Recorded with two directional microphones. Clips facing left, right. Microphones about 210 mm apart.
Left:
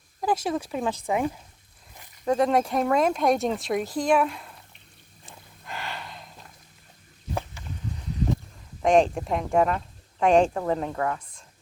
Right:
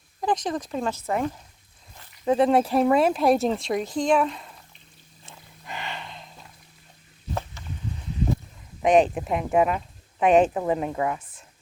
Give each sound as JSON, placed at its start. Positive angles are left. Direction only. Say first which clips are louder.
{"t": 0.2, "sound": "speech", "louder": "even", "side_deg": 5}
{"t": 2.2, "sound": "speech", "louder": "right 2 dB", "side_deg": -5}
{"t": 3.8, "sound": "speech", "louder": "right 2 dB", "side_deg": -20}
{"t": 4.1, "sound": "speech", "louder": "even", "side_deg": 5}
{"t": 5.6, "sound": "a sound", "louder": "right 1 dB", "side_deg": 0}
{"t": 8.8, "sound": "speech", "louder": "right 1 dB", "side_deg": 0}